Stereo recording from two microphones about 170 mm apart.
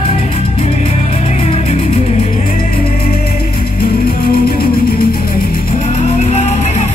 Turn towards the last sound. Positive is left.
turn(degrees=65)  # may be behind; listen again after turning